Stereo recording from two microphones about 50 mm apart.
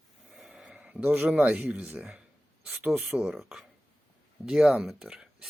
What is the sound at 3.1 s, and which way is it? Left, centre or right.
Speech, centre.